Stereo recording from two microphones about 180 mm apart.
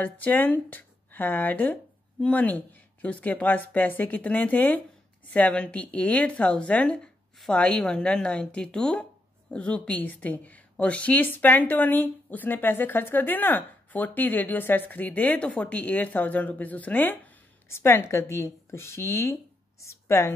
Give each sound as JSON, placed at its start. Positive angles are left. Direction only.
{"t": 0.0, "sound": "a woman's voice", "side_deg": 10}